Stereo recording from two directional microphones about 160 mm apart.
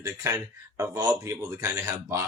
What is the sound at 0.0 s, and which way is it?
A man's voice, 20° right (ahead or behind).